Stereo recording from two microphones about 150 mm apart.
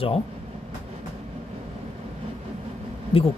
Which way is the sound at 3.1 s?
40° left (ahead or behind).